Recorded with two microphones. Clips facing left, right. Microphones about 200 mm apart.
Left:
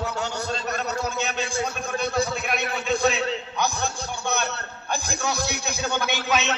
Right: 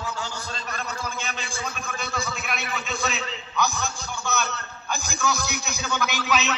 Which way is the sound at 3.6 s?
60° left (ahead or behind).